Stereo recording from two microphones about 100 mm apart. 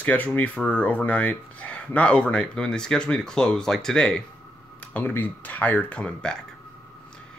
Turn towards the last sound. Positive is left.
turn(degrees=10)  # may be behind; listen again after turning